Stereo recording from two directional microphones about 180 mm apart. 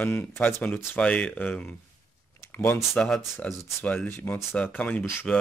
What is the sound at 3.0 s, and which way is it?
Speech, centre (ahead or behind).